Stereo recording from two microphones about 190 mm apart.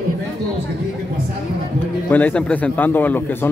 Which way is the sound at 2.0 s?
10° left (ahead or behind).